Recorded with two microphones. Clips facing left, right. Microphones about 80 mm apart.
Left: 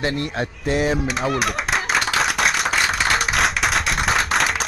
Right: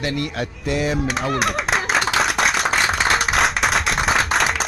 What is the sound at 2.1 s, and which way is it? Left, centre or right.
Clapping, centre.